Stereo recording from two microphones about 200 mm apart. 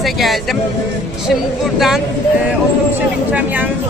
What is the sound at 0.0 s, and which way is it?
Speech, centre (ahead or behind).